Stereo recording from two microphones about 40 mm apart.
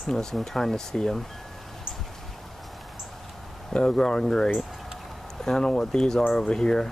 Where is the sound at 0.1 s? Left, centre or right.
Centre.